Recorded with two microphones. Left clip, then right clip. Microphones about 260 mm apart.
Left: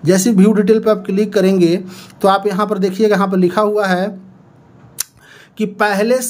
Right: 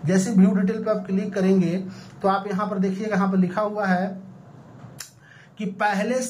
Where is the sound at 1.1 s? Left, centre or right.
Left.